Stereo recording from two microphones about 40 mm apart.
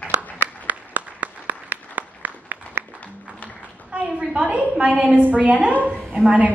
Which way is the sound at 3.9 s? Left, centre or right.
Right.